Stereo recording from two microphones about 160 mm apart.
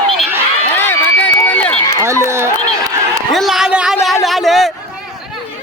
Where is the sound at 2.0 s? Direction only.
15° right (ahead or behind).